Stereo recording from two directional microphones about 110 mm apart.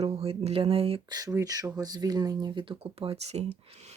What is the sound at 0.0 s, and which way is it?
Speech, 65° right (ahead or behind).